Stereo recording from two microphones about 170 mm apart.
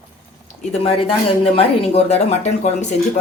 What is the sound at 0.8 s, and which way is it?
Speech, 35° left (ahead or behind).